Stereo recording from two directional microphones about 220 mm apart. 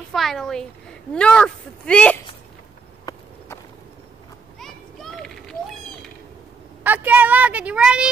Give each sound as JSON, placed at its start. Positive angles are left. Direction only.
{"t": 0.1, "sound": "a woman's voice", "side_deg": 0}
{"t": 3.1, "sound": "walk", "side_deg": 15}
{"t": 4.6, "sound": "children playing", "side_deg": 0}
{"t": 6.8, "sound": "a woman's voice", "side_deg": -10}